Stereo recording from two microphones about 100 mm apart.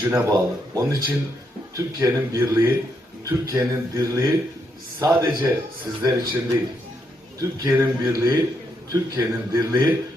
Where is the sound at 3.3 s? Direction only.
40° right (ahead or behind).